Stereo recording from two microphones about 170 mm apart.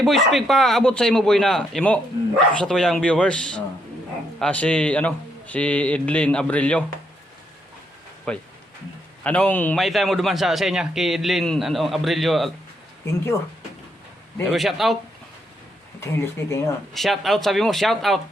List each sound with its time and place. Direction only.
0.0 s a man's voice: centre (ahead or behind)
8.3 s a man's voice: 5° left (ahead or behind)
14.5 s a man's voice: centre (ahead or behind)
16.0 s a man's voice: 15° left (ahead or behind)
16.9 s a man's voice: centre (ahead or behind)